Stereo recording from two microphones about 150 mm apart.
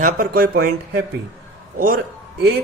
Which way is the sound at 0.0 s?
75° right (ahead or behind).